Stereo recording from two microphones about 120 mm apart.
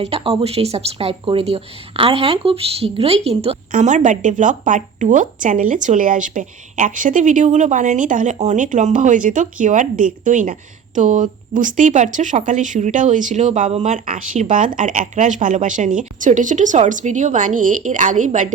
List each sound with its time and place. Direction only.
0.1 s speech: 55° right (ahead or behind)
3.7 s a woman's voice: 90° right